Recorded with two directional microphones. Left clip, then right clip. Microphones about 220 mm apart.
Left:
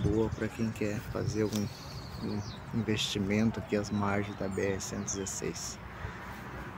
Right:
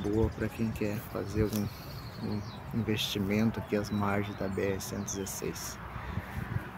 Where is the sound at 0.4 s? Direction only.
Centre (ahead or behind).